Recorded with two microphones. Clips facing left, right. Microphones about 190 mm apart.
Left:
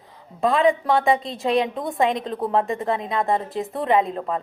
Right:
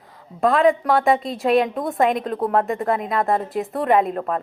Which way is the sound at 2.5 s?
20° left (ahead or behind).